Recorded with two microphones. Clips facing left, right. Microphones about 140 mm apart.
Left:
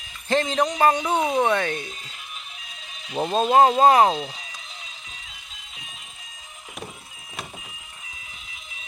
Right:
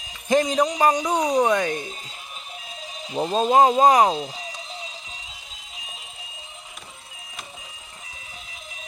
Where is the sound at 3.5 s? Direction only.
15° right (ahead or behind).